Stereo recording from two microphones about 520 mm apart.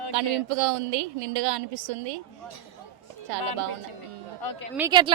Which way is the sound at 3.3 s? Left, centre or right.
Right.